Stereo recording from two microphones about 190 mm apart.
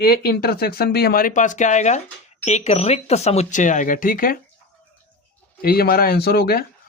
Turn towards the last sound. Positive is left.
turn(degrees=50)  # may be behind; listen again after turning